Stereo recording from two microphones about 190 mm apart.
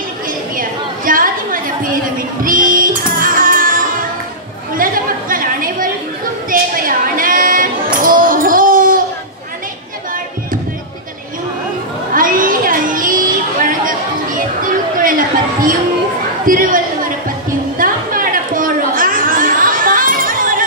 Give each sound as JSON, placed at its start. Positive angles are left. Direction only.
{"t": 0.6, "sound": "chatter", "side_deg": -45}
{"t": 2.4, "sound": "music", "side_deg": -45}
{"t": 4.7, "sound": "chatter", "side_deg": -45}
{"t": 6.5, "sound": "a sound", "side_deg": -45}
{"t": 12.1, "sound": "a sound", "side_deg": -45}
{"t": 16.4, "sound": "chatter", "side_deg": -45}